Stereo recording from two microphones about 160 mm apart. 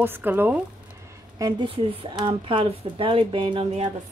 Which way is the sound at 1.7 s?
35° right (ahead or behind).